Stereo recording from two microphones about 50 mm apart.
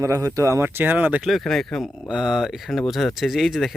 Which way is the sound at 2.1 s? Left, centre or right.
Centre.